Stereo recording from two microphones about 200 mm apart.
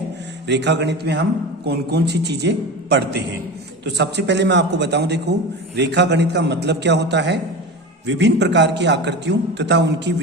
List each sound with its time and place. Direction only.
0.4 s a man's voice: 60° right (ahead or behind)